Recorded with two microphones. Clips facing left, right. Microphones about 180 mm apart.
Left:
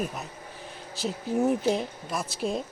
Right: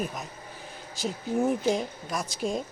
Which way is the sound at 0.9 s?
Centre (ahead or behind).